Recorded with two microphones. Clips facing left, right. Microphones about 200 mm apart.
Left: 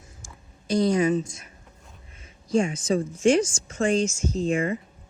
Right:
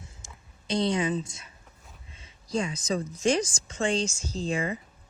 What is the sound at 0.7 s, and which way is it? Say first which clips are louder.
Speech: left 5 dB; 25° right (ahead or behind).